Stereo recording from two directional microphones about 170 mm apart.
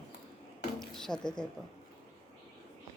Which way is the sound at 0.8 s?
5° left (ahead or behind).